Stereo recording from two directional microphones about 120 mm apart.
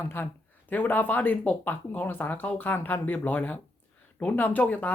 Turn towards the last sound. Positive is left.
turn(degrees=10)  # may be behind; listen again after turning